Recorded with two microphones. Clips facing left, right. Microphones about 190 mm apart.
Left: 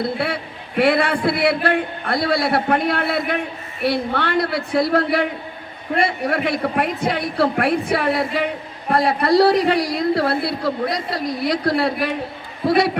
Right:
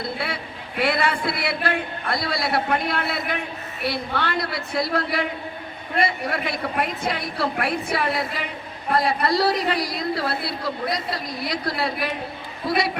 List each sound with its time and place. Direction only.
0.8 s a woman's voice: 60° left (ahead or behind)